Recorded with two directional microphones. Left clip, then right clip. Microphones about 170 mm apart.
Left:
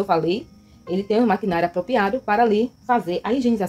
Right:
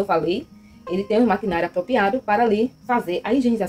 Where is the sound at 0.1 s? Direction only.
25° left (ahead or behind).